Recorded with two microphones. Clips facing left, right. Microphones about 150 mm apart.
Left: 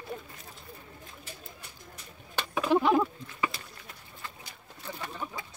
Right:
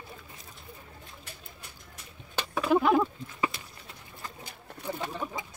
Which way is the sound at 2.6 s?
Centre (ahead or behind).